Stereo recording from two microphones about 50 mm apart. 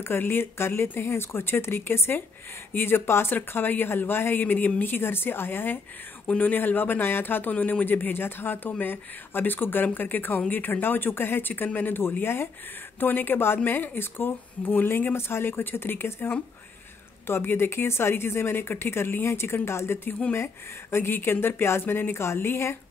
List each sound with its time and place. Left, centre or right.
0.0 s speech: left
3.3 s speech: left
6.2 s speech: left
7.5 s speech: left
7.8 s speech: left